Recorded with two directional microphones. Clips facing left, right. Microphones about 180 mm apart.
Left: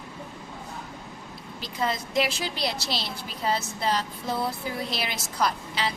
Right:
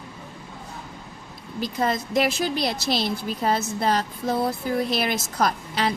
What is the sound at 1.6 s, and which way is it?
A woman's voice, 50° right (ahead or behind).